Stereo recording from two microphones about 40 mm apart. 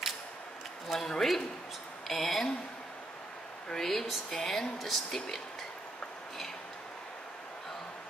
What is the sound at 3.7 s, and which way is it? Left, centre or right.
Speech, centre.